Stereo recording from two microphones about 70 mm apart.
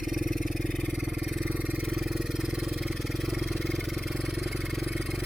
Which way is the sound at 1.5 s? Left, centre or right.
Right.